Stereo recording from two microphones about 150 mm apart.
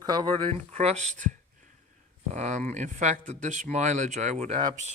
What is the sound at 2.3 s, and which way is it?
Speech, 50° right (ahead or behind).